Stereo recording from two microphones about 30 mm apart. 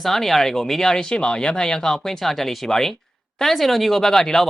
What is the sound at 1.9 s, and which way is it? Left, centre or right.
Speech, centre.